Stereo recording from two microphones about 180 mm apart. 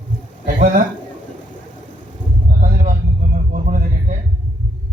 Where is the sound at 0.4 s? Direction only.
55° right (ahead or behind).